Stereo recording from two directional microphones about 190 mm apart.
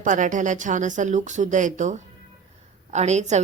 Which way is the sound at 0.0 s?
40° right (ahead or behind).